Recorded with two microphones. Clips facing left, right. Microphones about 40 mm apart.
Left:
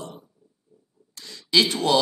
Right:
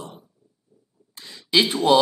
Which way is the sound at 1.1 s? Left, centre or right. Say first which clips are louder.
Right 1 dB; centre.